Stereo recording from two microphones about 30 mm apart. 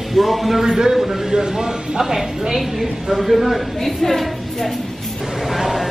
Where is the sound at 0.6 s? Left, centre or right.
Centre.